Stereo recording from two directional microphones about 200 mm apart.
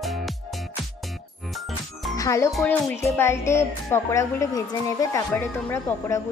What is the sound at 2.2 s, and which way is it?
Speech, 15° left (ahead or behind).